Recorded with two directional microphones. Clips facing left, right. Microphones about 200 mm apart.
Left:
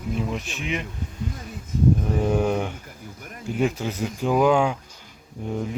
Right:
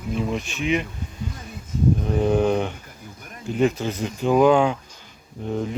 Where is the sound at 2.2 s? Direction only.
10° left (ahead or behind).